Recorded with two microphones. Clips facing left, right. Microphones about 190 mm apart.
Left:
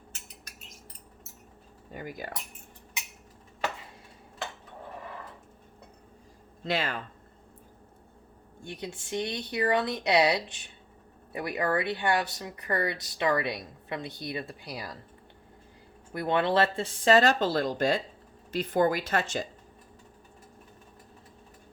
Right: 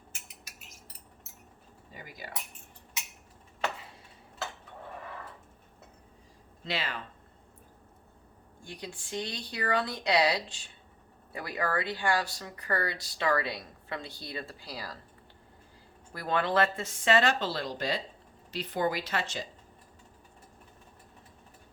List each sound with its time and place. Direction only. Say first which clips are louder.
1.9 s speech: left 8 dB; 50° left (ahead or behind)
6.7 s speech: left 5 dB; 50° left (ahead or behind)
8.6 s speech: left 4 dB; 25° left (ahead or behind)
16.1 s speech: left 3 dB; 20° left (ahead or behind); by 19.5 s 45° left (ahead or behind)